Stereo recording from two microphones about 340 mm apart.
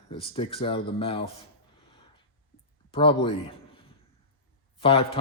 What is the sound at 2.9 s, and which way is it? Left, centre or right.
Speech, centre.